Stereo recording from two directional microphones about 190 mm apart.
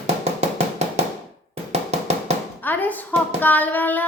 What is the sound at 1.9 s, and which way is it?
Music, 35° right (ahead or behind).